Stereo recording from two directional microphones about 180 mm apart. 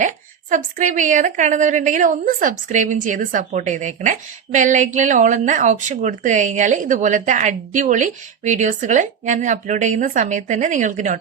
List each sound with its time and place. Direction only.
0.5 s speech: 45° right (ahead or behind)